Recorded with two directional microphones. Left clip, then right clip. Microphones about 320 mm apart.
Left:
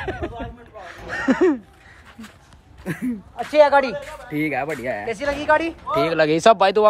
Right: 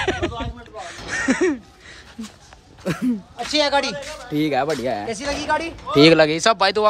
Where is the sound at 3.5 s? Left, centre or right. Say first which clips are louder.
Left 5 dB; centre.